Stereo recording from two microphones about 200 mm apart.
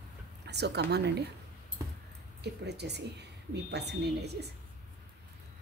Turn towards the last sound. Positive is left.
turn(degrees=-55)  # may be behind; listen again after turning